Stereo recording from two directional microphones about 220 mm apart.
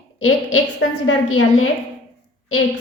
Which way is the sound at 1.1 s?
65° left (ahead or behind).